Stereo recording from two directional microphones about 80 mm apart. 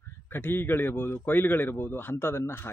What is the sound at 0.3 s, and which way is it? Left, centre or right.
Speech, left.